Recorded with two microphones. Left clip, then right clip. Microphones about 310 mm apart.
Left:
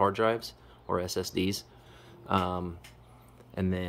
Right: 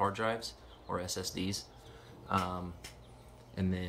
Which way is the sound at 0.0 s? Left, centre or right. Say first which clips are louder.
Left 6 dB; centre.